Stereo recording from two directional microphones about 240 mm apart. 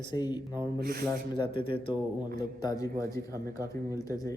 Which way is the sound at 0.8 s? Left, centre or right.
Right.